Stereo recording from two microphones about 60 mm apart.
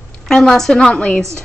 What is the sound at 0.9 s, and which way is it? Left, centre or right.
Speech, left.